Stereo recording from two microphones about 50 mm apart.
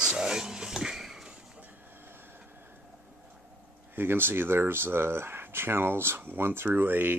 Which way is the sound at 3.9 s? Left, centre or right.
Right.